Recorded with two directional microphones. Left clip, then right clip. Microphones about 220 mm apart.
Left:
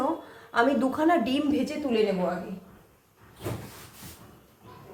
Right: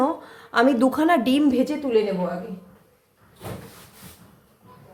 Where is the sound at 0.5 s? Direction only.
50° right (ahead or behind).